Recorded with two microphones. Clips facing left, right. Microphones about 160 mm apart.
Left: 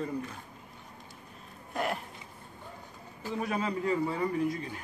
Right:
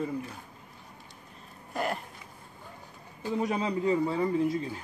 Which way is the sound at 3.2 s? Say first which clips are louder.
Right 3 dB; 20° right (ahead or behind).